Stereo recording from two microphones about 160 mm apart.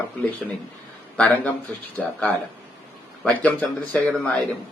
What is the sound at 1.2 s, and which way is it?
Speech, 5° left (ahead or behind).